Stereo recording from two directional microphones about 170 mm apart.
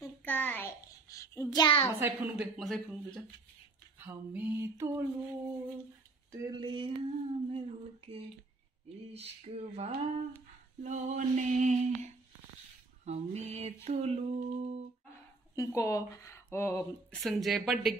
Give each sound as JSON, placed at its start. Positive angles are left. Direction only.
{"t": 0.0, "sound": "child singing", "side_deg": 10}
{"t": 2.0, "sound": "speech", "side_deg": -10}
{"t": 4.0, "sound": "a sound", "side_deg": -10}
{"t": 6.3, "sound": "female singing", "side_deg": -20}
{"t": 10.8, "sound": "a sound", "side_deg": -45}
{"t": 13.0, "sound": "female singing", "side_deg": -40}
{"t": 15.5, "sound": "speech", "side_deg": 20}
{"t": 17.1, "sound": "speech", "side_deg": 0}